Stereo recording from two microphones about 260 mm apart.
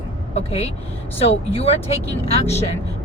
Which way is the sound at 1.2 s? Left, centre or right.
Left.